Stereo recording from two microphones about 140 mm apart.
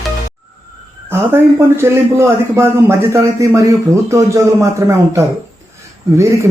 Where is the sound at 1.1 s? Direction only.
15° right (ahead or behind).